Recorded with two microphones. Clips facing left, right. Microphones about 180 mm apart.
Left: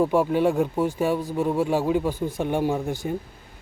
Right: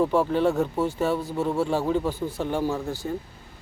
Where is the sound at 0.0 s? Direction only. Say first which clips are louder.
Left 1 dB; 10° left (ahead or behind).